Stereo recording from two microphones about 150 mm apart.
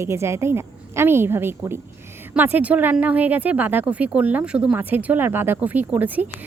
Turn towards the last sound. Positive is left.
turn(degrees=-10)  # may be behind; listen again after turning